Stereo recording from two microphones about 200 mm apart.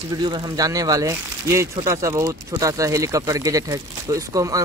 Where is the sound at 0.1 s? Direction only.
20° right (ahead or behind).